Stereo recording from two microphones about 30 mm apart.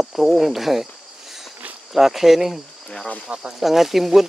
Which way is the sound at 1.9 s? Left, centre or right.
Centre.